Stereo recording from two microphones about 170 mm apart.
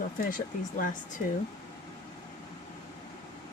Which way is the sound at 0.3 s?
55° left (ahead or behind).